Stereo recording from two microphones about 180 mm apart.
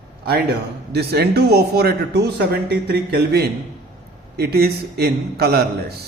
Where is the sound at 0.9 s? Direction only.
65° right (ahead or behind).